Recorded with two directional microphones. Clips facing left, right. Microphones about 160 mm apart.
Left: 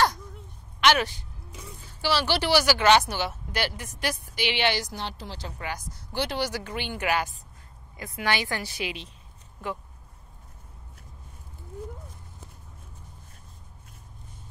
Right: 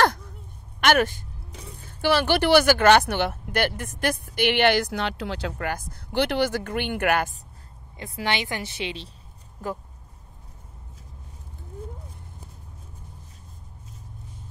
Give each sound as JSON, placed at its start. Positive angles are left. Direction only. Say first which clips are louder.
{"t": 0.7, "sound": "a woman's voice", "louder": "right 2 dB", "side_deg": -50}
{"t": 8.0, "sound": "a woman's voice", "louder": "right 1 dB", "side_deg": -25}
{"t": 9.6, "sound": "speech", "louder": "right 2 dB", "side_deg": -40}